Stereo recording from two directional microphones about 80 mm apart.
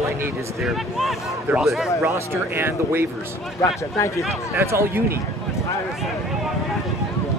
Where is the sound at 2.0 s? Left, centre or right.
Right.